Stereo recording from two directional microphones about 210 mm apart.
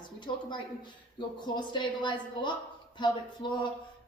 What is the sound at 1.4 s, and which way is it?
Speech, 20° left (ahead or behind).